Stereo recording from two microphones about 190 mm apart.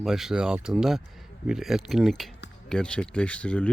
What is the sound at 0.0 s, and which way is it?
Speech, centre (ahead or behind).